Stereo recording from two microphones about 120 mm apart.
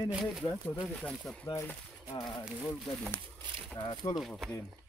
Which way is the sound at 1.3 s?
5° left (ahead or behind).